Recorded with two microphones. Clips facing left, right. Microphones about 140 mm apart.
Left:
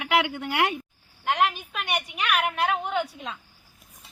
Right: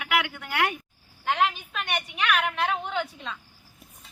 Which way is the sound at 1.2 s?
10° left (ahead or behind).